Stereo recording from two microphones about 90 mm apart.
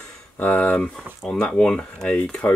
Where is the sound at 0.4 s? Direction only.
15° left (ahead or behind).